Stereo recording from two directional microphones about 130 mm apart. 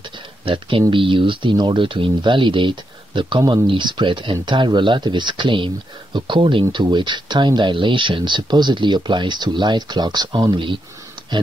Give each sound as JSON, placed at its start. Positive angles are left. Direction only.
{"t": 0.5, "sound": "speech", "side_deg": -40}